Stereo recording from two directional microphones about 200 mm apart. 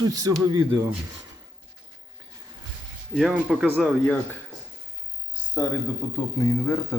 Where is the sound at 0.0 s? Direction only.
20° right (ahead or behind).